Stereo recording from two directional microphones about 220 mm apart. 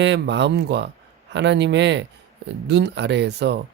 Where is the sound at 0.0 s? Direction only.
55° right (ahead or behind).